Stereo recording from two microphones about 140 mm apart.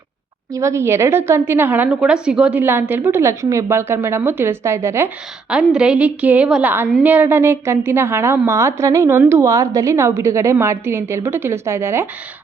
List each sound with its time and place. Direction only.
0.5 s a woman's voice: 20° right (ahead or behind)